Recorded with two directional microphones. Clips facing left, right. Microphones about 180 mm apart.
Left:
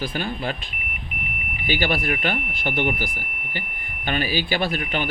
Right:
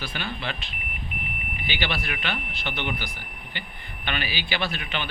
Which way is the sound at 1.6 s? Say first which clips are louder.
Left 7 dB; 45° left (ahead or behind).